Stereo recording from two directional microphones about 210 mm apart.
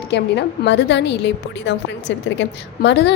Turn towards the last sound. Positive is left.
turn(degrees=55)  # may be behind; listen again after turning